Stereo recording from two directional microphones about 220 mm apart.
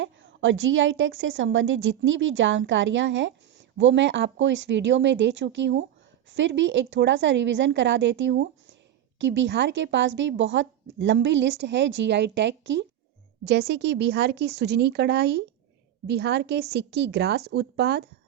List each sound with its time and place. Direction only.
0.0 s a woman's voice: 55° right (ahead or behind)